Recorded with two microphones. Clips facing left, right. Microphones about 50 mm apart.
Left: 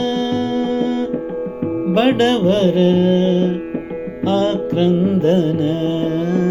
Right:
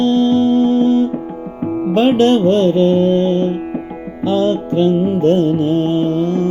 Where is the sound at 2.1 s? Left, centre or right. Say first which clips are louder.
Right 3 dB; left.